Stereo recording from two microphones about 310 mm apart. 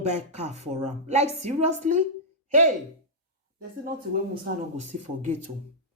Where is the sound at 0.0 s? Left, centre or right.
Right.